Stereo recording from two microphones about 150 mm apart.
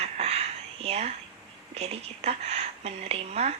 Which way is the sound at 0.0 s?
45° right (ahead or behind).